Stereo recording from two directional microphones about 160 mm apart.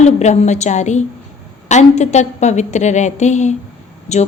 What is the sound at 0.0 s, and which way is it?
A woman's voice, 45° left (ahead or behind).